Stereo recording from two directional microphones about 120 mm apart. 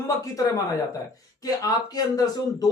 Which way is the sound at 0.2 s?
30° left (ahead or behind).